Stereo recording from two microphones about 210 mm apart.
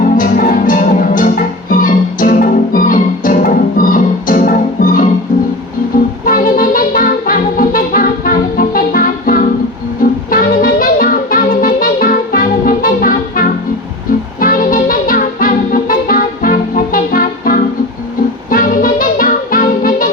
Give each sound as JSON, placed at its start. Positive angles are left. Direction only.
{"t": 0.0, "sound": "music", "side_deg": 40}
{"t": 6.2, "sound": "music", "side_deg": 40}